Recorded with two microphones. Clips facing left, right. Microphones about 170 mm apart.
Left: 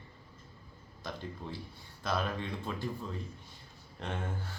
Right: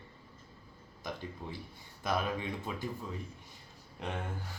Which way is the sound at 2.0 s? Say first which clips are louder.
Right 1 dB; 10° right (ahead or behind).